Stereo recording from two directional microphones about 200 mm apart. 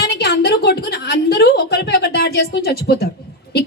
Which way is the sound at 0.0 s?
55° left (ahead or behind).